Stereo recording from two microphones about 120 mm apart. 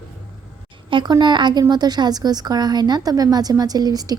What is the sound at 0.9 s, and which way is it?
A woman's voice, 40° right (ahead or behind).